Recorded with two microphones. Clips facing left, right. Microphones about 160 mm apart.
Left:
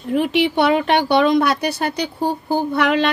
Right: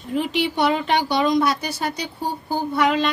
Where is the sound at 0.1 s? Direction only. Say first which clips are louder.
Left 5 dB; 60° left (ahead or behind).